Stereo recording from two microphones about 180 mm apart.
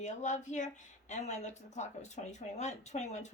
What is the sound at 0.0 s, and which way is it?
A woman's voice, 40° left (ahead or behind).